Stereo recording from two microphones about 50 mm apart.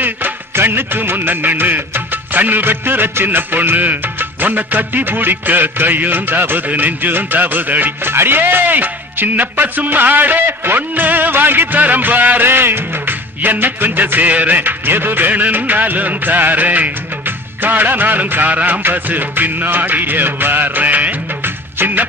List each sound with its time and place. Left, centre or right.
0.0 s music: right
8.1 s music: right